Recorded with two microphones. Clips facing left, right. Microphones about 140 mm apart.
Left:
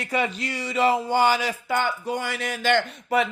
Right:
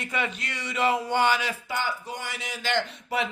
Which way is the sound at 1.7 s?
60° left (ahead or behind).